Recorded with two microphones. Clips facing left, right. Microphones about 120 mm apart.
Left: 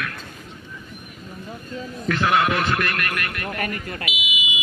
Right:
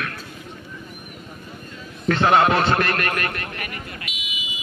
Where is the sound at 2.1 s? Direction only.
30° right (ahead or behind).